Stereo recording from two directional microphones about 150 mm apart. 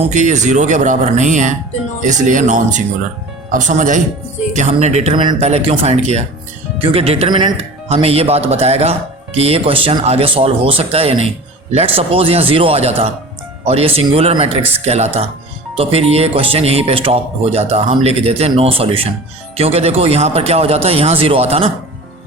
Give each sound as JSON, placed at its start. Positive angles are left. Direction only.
{"t": 0.1, "sound": "speech", "side_deg": -55}